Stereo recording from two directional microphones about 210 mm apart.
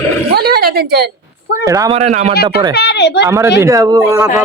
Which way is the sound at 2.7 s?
50° left (ahead or behind).